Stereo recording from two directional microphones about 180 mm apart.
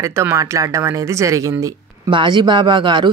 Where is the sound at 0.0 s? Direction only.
15° right (ahead or behind).